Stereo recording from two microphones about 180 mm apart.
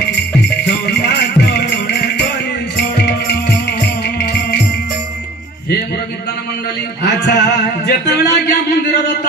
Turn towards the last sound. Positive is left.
turn(degrees=70)  # may be behind; listen again after turning